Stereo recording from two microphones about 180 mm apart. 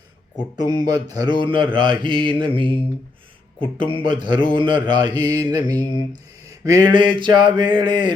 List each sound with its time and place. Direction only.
0.5 s mantra: 20° right (ahead or behind)